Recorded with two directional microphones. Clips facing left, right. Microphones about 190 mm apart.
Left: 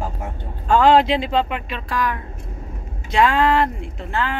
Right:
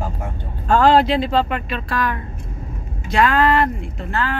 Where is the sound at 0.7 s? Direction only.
20° left (ahead or behind).